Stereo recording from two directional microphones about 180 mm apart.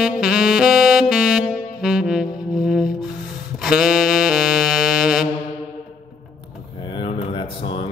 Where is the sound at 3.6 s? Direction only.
Centre (ahead or behind).